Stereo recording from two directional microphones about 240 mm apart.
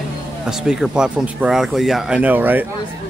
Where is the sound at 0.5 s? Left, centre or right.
Centre.